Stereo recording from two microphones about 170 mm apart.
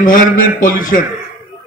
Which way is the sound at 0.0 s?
55° left (ahead or behind).